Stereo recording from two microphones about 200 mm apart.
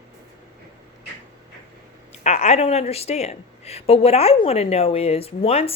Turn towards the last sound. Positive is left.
turn(degrees=30)  # may be behind; listen again after turning